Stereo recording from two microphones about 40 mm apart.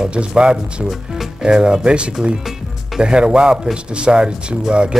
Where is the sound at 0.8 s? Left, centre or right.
Centre.